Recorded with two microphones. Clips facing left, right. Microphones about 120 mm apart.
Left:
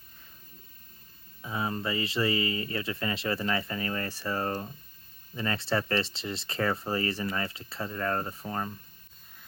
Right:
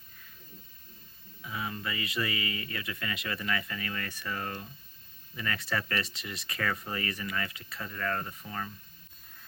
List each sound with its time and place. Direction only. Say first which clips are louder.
1.4 s speech: left 5 dB; 30° left (ahead or behind)